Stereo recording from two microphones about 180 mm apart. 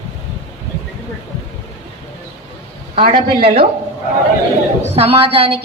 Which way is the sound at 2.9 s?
45° right (ahead or behind).